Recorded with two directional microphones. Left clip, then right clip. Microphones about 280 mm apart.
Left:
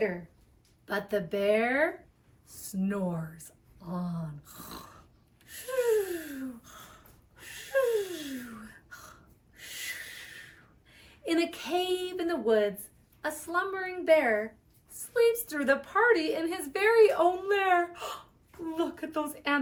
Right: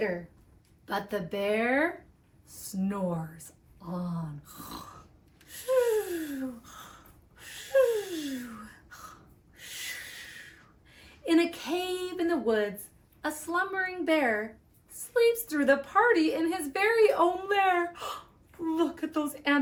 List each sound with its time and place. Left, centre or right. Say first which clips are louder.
0.9 s a woman's voice: left 1 dB; centre
5.5 s gasp: right 2 dB; centre
9.6 s owl: even; centre
10.9 s a woman's voice: right 4 dB; centre